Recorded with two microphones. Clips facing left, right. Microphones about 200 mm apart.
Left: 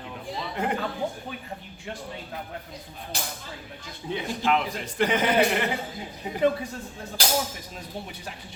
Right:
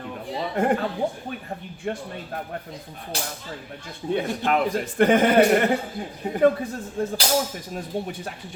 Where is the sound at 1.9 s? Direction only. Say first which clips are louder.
Right 9 dB; 55° right (ahead or behind).